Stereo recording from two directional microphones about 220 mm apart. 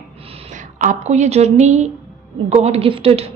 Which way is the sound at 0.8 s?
35° right (ahead or behind).